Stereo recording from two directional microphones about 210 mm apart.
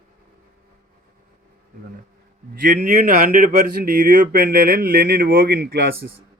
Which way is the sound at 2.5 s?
35° right (ahead or behind).